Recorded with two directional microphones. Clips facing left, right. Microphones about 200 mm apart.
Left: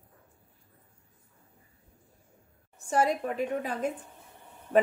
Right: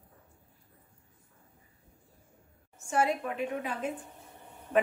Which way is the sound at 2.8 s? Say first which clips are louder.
Left 2 dB; 40° left (ahead or behind).